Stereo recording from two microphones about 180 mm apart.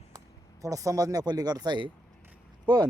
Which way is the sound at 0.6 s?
20° right (ahead or behind).